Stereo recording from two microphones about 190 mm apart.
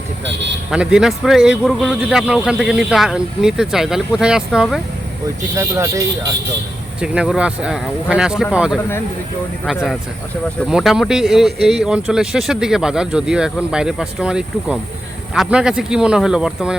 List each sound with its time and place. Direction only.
0.7 s speech: 5° right (ahead or behind)
5.5 s speech: 15° right (ahead or behind)
7.0 s speech: 5° right (ahead or behind)